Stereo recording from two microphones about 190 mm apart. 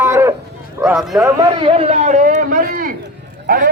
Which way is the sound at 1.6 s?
30° right (ahead or behind).